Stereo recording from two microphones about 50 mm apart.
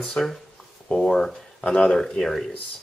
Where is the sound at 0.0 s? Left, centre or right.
Centre.